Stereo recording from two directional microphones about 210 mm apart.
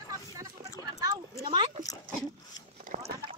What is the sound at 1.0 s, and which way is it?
Speech, 20° right (ahead or behind).